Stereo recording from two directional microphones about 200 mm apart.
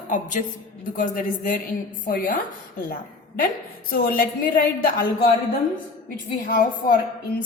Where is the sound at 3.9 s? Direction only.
45° left (ahead or behind).